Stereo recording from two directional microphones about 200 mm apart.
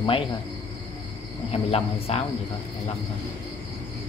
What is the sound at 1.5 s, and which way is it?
Speech, 30° left (ahead or behind).